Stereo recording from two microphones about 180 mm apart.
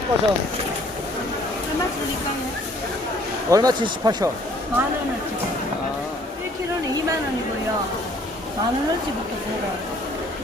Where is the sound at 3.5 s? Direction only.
20° right (ahead or behind).